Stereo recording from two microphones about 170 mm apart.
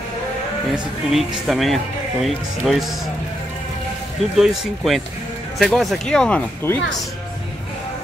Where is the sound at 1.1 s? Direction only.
Centre (ahead or behind).